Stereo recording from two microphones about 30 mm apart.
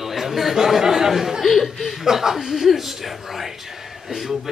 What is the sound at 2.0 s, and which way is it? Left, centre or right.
Speech, centre.